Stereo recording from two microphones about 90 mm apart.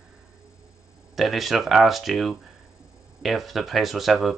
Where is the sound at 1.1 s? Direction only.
Centre (ahead or behind).